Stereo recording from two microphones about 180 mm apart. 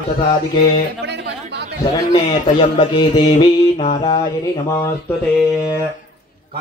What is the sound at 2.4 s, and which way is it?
Speech, 35° left (ahead or behind).